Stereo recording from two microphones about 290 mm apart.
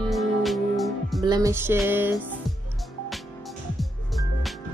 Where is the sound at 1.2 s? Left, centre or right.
Centre.